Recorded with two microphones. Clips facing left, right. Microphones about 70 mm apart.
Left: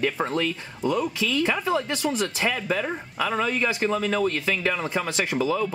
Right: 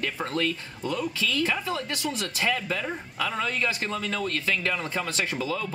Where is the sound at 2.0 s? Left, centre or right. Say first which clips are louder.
Left 5 dB; left.